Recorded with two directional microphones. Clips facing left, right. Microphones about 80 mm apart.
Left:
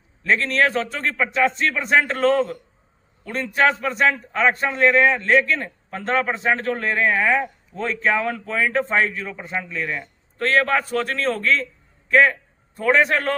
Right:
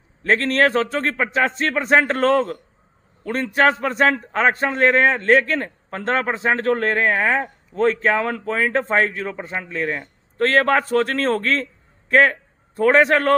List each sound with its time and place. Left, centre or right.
0.2 s a man's voice: right